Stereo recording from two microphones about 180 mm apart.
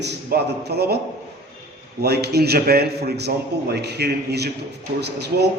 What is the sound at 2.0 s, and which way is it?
A man's voice, 65° right (ahead or behind).